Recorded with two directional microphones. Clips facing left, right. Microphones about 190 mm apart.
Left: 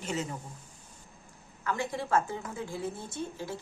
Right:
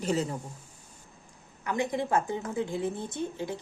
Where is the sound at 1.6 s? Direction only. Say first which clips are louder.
Right 4 dB; 20° right (ahead or behind).